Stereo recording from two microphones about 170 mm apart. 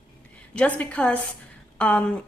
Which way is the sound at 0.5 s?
5° left (ahead or behind).